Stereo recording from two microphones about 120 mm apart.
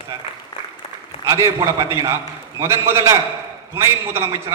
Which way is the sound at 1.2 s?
25° right (ahead or behind).